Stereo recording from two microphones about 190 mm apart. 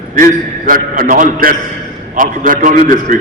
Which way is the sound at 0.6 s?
45° right (ahead or behind).